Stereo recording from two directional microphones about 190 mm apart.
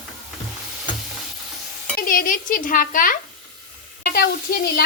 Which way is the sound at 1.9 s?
45° left (ahead or behind).